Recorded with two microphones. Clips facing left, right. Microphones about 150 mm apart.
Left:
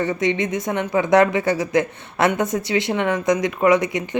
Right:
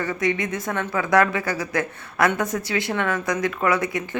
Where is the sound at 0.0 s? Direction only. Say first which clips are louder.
Left 3 dB; 25° left (ahead or behind).